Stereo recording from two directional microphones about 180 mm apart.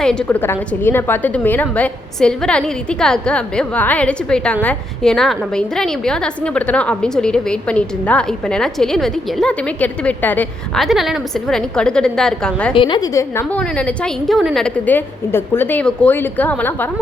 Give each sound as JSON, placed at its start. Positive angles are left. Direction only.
{"t": 0.0, "sound": "a woman's voice", "side_deg": 5}
{"t": 12.7, "sound": "a woman's voice", "side_deg": 25}